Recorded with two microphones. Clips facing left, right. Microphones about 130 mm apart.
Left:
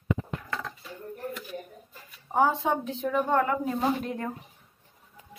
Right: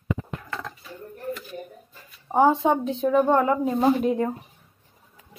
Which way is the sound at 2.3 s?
25° right (ahead or behind).